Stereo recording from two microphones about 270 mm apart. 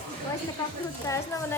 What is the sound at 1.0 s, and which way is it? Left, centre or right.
Speech, centre.